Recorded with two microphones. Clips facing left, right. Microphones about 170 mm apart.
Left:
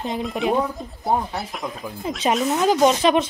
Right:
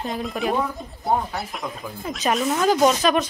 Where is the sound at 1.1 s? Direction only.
Centre (ahead or behind).